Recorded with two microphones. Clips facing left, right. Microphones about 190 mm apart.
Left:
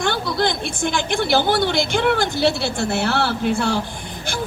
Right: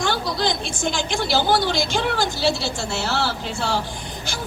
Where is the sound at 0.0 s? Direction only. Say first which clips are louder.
Left 2 dB; 55° left (ahead or behind).